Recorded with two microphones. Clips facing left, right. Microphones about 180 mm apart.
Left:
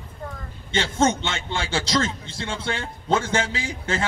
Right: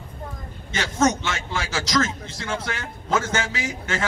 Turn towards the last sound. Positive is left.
turn(degrees=30)  # may be behind; listen again after turning